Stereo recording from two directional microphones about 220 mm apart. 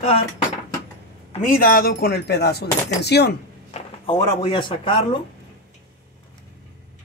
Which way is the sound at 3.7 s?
30° left (ahead or behind).